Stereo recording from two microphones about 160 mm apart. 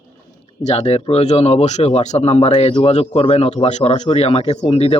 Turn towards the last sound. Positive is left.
turn(degrees=40)  # may be behind; listen again after turning